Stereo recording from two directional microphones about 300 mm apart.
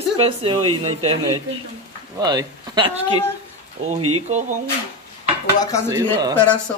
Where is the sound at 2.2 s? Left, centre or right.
Centre.